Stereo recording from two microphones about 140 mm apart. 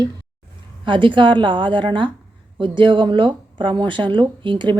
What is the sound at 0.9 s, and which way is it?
Speech, 35° right (ahead or behind).